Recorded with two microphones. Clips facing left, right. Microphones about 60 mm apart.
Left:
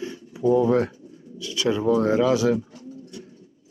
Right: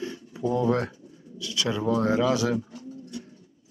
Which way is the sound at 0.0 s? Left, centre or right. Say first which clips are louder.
Left 6 dB; centre.